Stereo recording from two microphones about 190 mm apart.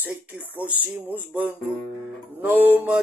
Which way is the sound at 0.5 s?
10° right (ahead or behind).